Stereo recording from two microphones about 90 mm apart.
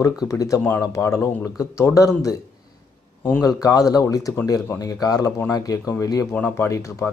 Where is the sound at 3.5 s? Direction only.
40° left (ahead or behind).